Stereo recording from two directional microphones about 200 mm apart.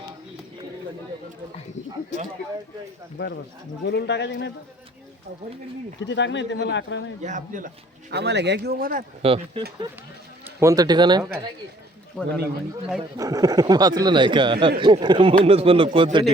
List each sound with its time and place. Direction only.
3.2 s speech: 55° left (ahead or behind)
6.0 s speech: 65° left (ahead or behind)
7.2 s speech: 40° right (ahead or behind)
8.1 s speech: 60° right (ahead or behind)
9.2 s a man's voice: 25° right (ahead or behind)
10.6 s a man's voice: 15° right (ahead or behind)
13.1 s a man's voice: 15° right (ahead or behind)